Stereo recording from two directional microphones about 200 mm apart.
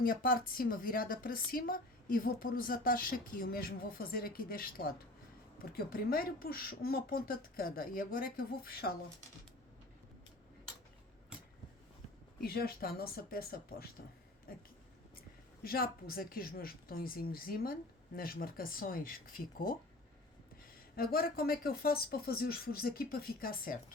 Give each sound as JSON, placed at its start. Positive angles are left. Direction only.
{"t": 0.0, "sound": "a woman's voice", "side_deg": 45}
{"t": 12.4, "sound": "a woman's voice", "side_deg": 50}
{"t": 20.9, "sound": "a woman's voice", "side_deg": 50}